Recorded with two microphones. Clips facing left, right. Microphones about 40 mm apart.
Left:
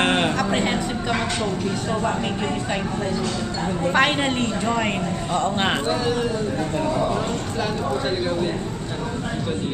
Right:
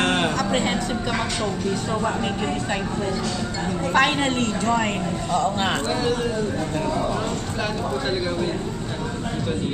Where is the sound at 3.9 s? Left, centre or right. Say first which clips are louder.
Even; centre.